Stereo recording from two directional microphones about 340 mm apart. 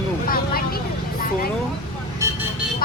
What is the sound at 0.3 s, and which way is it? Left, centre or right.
Vehicle, left.